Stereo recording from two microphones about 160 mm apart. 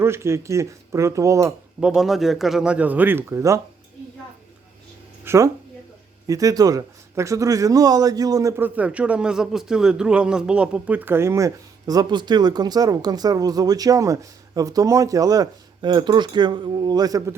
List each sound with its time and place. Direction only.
0.0 s speech: 15° right (ahead or behind)
1.8 s a man's voice: 5° right (ahead or behind)
5.2 s a sound: 15° right (ahead or behind)
6.2 s speech: 20° right (ahead or behind)